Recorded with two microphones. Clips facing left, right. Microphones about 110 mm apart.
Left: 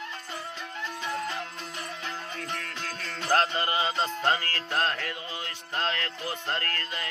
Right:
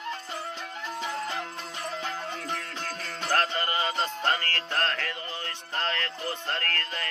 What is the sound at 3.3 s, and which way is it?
Music, 20° left (ahead or behind).